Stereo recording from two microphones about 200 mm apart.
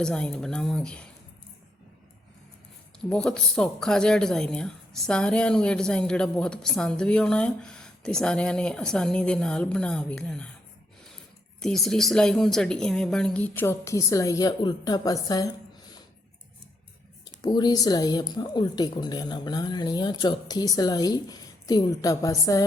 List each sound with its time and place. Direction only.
0.0 s speech: 5° left (ahead or behind)
3.0 s speech: 5° left (ahead or behind)
11.6 s speech: centre (ahead or behind); by 15.5 s 20° left (ahead or behind)
17.4 s a woman's voice: 20° left (ahead or behind)